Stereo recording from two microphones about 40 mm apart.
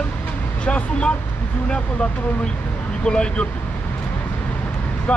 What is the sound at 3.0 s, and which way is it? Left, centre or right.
Speech, left.